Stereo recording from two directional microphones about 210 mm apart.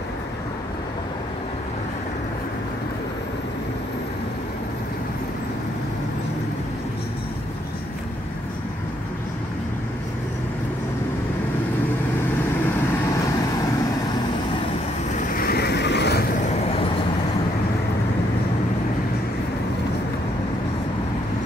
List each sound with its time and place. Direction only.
15.3 s vehicle: 45° left (ahead or behind)
16.4 s vehicle: 30° left (ahead or behind)